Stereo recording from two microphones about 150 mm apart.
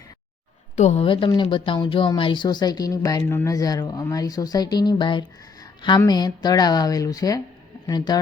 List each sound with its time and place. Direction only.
0.8 s a woman's voice: 50° left (ahead or behind)
1.0 s speech: 35° left (ahead or behind)